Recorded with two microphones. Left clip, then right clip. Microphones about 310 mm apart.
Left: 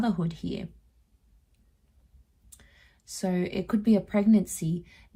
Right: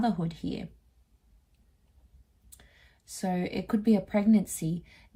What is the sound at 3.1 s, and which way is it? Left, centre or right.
Speech, centre.